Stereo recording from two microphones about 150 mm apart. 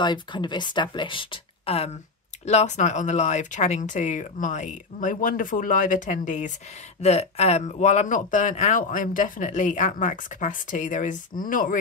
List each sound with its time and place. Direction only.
0.0 s speech: 30° left (ahead or behind)
2.4 s speech: 50° left (ahead or behind)